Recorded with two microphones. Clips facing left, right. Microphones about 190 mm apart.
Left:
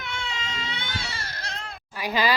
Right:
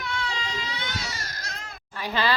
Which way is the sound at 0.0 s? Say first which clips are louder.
Right 3 dB; 25° left (ahead or behind).